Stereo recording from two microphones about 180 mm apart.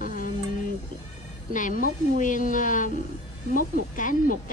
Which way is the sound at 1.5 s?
50° left (ahead or behind).